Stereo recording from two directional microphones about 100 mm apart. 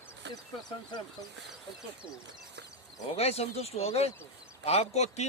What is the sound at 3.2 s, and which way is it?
A man's voice, 90° left.